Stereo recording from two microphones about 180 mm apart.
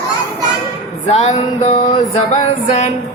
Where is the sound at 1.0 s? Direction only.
35° left (ahead or behind).